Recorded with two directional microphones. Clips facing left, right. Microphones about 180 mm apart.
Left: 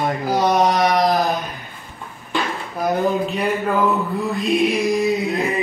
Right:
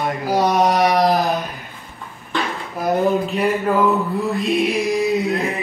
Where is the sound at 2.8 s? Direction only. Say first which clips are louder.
Right 1 dB; centre (ahead or behind).